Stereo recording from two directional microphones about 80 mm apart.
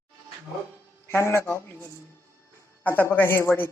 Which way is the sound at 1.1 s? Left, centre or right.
Left.